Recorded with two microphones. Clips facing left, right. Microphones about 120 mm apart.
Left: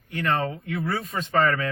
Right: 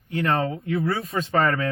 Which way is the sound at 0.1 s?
35° right (ahead or behind).